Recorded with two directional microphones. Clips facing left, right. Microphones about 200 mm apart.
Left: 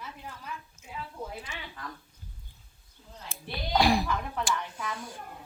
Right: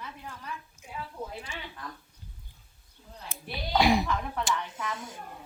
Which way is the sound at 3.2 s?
20° right (ahead or behind).